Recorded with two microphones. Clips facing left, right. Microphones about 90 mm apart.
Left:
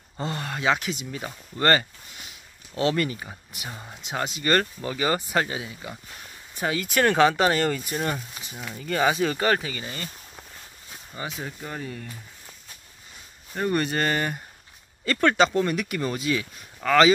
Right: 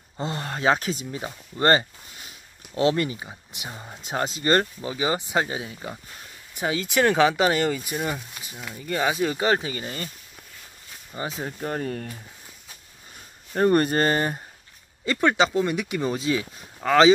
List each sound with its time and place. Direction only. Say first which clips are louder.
0.2 s speech: right 2 dB; 25° right (ahead or behind)
1.1 s speech: right 1 dB; 25° right (ahead or behind)
4.0 s speech: right 2 dB; 35° right (ahead or behind)
4.8 s speech: even; 15° right (ahead or behind)
9.4 s speech: right 1 dB; 25° right (ahead or behind)
11.1 s speech: right 3 dB; 30° right (ahead or behind); by 12.1 s 50° right (ahead or behind)
13.6 s speech: right 5 dB; 40° right (ahead or behind)
15.0 s speech: left 1 dB; 15° right (ahead or behind)